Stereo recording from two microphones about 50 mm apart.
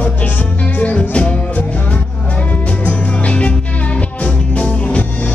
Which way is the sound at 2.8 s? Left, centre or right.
Left.